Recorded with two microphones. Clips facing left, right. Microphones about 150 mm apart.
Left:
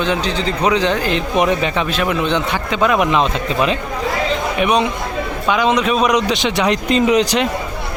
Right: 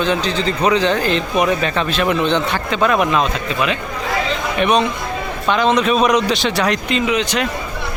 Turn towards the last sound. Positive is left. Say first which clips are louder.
# left 4 dB
turn(degrees=35)  # may be behind; listen again after turning